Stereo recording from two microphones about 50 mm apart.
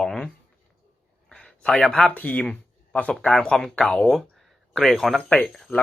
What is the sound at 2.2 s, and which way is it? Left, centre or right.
Speech, left.